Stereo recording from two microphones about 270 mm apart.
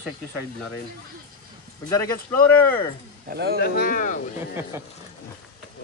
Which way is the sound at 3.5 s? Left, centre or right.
Left.